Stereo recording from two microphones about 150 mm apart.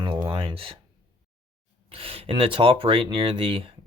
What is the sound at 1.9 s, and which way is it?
Speech, 40° right (ahead or behind).